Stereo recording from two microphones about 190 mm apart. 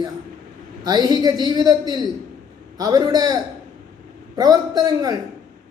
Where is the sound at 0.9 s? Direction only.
20° right (ahead or behind).